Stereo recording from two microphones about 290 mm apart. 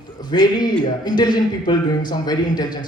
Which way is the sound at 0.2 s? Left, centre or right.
Centre.